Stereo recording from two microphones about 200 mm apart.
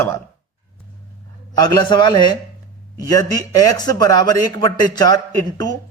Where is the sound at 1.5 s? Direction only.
20° left (ahead or behind).